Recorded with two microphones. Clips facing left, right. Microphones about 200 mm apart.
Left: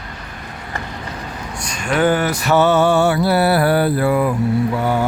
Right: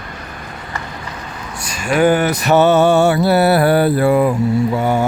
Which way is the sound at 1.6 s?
5° right (ahead or behind).